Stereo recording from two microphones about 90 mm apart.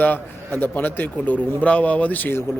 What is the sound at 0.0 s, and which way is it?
A man's voice, 20° left (ahead or behind).